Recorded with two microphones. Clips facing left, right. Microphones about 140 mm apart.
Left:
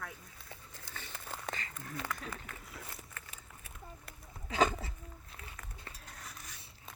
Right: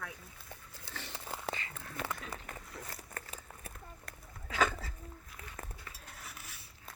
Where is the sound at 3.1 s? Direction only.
40° right (ahead or behind).